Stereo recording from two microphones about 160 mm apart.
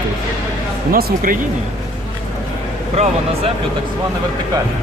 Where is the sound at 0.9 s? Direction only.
65° right (ahead or behind).